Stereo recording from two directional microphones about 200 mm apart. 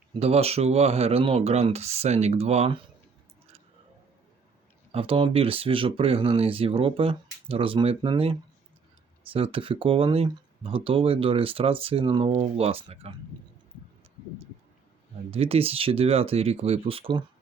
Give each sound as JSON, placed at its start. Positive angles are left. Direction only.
{"t": 0.2, "sound": "speech", "side_deg": -30}
{"t": 4.9, "sound": "speech", "side_deg": -25}
{"t": 15.3, "sound": "speech", "side_deg": -30}